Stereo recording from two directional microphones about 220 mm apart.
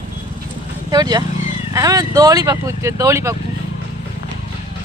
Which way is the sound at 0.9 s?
15° right (ahead or behind).